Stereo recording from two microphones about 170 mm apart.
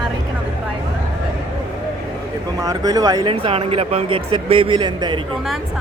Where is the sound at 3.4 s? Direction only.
35° right (ahead or behind).